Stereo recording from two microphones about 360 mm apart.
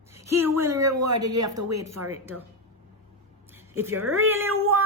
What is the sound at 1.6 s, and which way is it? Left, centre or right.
Speech, right.